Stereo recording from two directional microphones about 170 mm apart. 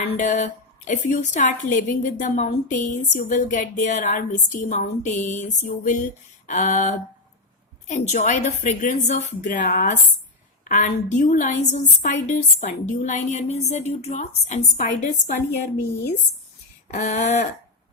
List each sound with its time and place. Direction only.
0.1 s a woman's voice: 45° left (ahead or behind)
16.9 s a woman's voice: 45° left (ahead or behind)